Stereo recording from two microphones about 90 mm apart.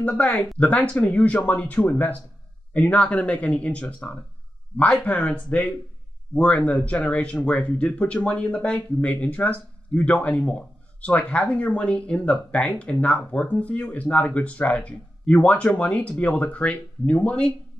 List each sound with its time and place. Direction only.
0.0 s speech: 15° left (ahead or behind)